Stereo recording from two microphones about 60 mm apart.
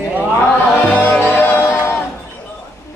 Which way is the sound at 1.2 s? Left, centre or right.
Left.